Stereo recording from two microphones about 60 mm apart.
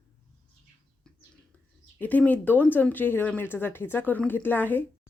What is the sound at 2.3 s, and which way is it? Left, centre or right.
A woman's voice, left.